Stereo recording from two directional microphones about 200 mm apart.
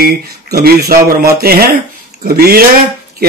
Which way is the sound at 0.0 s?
50° right (ahead or behind).